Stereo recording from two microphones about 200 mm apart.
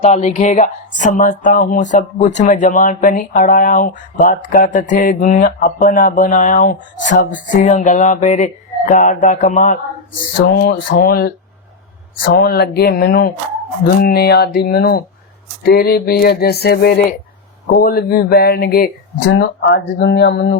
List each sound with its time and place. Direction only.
0.0 s speech: 35° left (ahead or behind)
10.6 s speech: 50° left (ahead or behind)
12.3 s speech: 50° left (ahead or behind)